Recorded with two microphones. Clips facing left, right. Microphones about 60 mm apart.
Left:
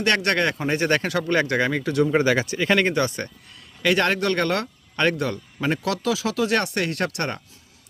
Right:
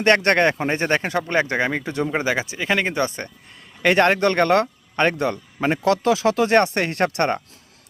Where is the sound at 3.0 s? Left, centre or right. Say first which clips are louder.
Even; right.